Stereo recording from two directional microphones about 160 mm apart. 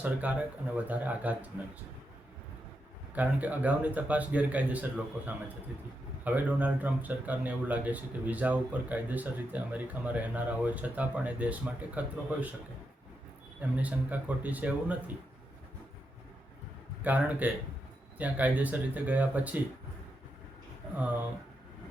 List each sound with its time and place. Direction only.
0.0 s speech: 10° right (ahead or behind)
3.2 s speech: 10° right (ahead or behind)
13.7 s speech: 10° right (ahead or behind)
17.0 s speech: 10° right (ahead or behind)